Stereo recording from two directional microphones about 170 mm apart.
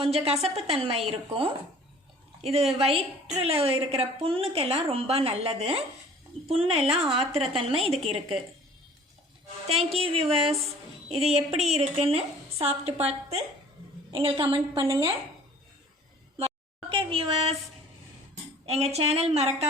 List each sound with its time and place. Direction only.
0.0 s a woman's voice: 35° right (ahead or behind)
9.6 s a woman's voice: 35° right (ahead or behind)
16.9 s a woman's voice: 35° right (ahead or behind)
18.6 s a woman's voice: 35° right (ahead or behind)